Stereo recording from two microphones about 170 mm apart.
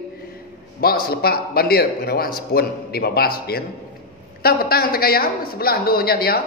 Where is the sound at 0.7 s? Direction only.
60° left (ahead or behind).